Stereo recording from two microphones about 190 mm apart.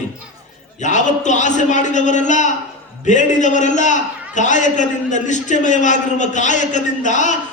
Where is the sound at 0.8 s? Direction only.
40° left (ahead or behind).